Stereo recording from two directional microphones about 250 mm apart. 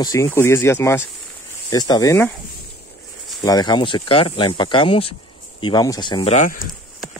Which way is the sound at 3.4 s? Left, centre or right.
Centre.